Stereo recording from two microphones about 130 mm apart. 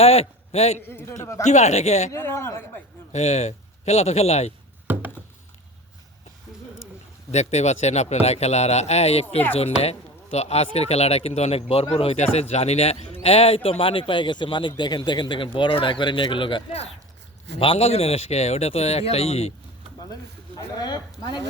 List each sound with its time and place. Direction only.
0.0 s a man's voice: 50° left (ahead or behind)
0.8 s a man's voice: 15° left (ahead or behind)
1.5 s a man's voice: 60° left (ahead or behind)
2.1 s a man's voice: 20° left (ahead or behind)
3.1 s speech: 60° left (ahead or behind)
4.9 s a sound: 15° right (ahead or behind)
7.3 s a man's voice: 60° left (ahead or behind)
20.6 s speech: 30° left (ahead or behind)